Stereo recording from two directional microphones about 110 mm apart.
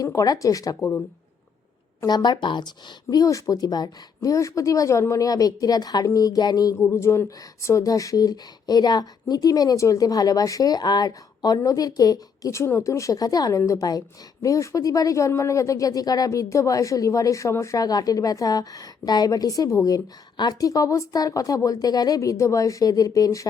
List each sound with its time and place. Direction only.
0.0 s speech: 35° left (ahead or behind)
0.8 s speech: 20° left (ahead or behind)
2.0 s speech: 40° left (ahead or behind)